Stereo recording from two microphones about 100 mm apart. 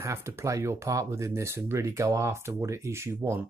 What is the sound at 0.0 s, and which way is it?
Speech, 30° right (ahead or behind).